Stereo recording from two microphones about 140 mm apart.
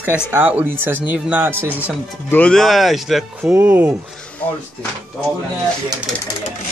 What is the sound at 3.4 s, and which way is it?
Speech, 15° right (ahead or behind).